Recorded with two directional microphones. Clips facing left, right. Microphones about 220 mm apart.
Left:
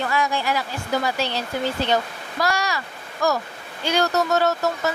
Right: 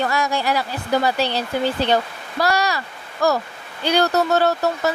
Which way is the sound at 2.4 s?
35° right (ahead or behind).